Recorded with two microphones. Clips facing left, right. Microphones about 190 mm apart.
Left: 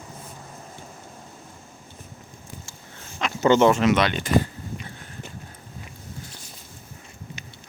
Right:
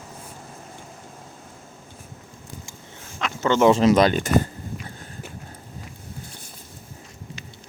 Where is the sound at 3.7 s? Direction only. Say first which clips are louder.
Right 4 dB; 35° right (ahead or behind).